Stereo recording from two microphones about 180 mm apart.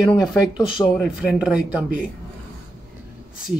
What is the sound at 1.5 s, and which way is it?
Speech, 5° right (ahead or behind).